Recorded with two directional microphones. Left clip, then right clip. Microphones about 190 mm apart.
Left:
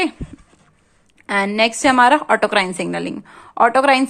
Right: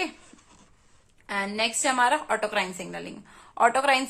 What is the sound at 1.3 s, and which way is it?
A woman's voice, 40° left (ahead or behind).